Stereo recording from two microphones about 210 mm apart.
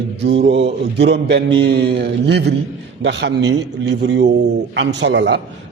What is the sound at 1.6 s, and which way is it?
Mantra, 50° right (ahead or behind).